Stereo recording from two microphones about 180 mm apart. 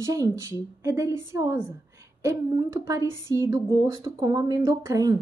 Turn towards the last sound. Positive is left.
turn(degrees=-20)  # may be behind; listen again after turning